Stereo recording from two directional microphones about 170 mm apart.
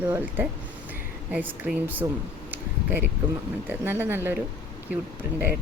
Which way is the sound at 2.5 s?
10° right (ahead or behind).